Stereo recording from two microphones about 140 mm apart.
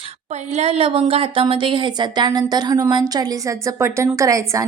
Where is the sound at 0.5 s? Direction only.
45° right (ahead or behind).